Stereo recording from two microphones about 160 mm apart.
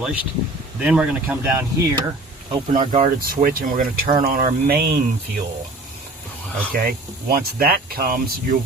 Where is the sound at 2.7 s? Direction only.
50° right (ahead or behind); by 5.0 s 70° right (ahead or behind).